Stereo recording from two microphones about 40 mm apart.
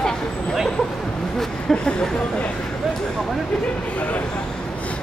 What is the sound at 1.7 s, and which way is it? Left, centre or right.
Speech, left.